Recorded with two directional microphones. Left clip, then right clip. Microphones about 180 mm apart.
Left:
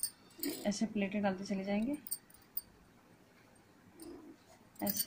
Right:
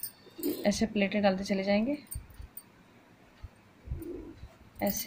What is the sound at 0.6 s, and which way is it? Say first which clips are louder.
A woman's voice: right 9 dB; 45° right (ahead or behind).